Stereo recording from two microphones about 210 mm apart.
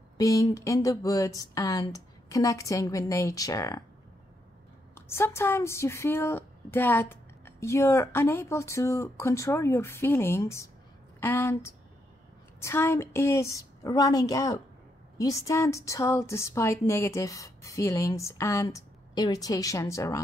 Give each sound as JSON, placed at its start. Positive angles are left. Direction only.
{"t": 0.2, "sound": "a woman's voice", "side_deg": 15}
{"t": 4.9, "sound": "a woman's voice", "side_deg": 10}